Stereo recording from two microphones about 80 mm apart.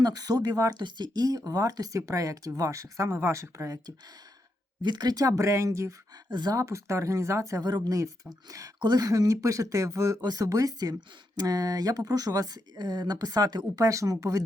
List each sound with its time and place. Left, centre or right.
0.0 s speech: right
0.8 s speech: right
4.8 s speech: right
5.4 s speech: right
6.3 s speech: right
6.6 s speech: right
7.6 s speech: right
8.3 s speech: right
13.8 s speech: right